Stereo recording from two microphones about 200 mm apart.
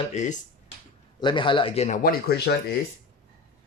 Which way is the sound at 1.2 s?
25° left (ahead or behind).